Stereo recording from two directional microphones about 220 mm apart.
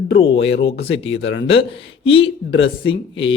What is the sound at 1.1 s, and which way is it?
Speech, 55° left (ahead or behind).